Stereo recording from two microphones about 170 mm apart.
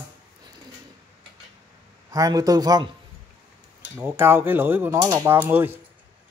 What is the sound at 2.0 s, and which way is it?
Speech, 20° right (ahead or behind).